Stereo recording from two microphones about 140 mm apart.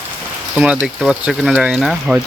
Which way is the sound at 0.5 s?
10° right (ahead or behind).